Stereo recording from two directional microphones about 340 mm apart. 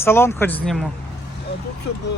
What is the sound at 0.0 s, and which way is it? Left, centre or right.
Speech, centre.